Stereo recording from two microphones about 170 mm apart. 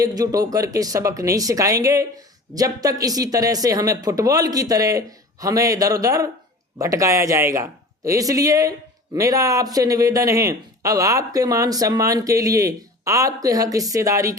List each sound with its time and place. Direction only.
0.0 s a man's voice: 20° right (ahead or behind)